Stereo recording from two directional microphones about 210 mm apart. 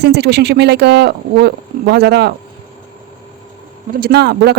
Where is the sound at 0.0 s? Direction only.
55° right (ahead or behind).